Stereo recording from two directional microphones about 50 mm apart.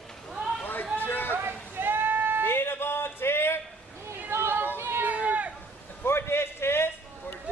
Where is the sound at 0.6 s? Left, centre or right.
Left.